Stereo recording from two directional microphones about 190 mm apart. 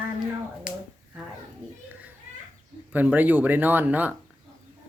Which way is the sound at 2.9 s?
10° right (ahead or behind).